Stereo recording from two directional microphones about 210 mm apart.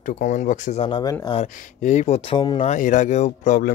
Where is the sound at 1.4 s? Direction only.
30° left (ahead or behind).